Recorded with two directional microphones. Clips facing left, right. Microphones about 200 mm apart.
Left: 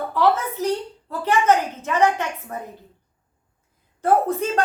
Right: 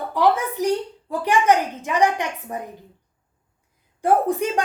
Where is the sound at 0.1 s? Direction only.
15° right (ahead or behind).